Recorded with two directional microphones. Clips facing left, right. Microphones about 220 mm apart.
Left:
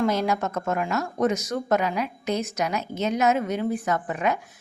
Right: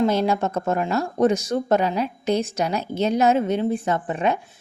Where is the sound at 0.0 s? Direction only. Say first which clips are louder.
Right 3 dB; 30° right (ahead or behind).